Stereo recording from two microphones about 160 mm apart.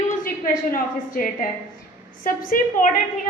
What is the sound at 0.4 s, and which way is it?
A woman's voice, 60° left (ahead or behind).